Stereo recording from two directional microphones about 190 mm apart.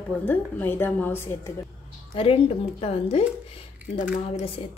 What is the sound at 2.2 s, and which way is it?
A woman's voice, 30° left (ahead or behind).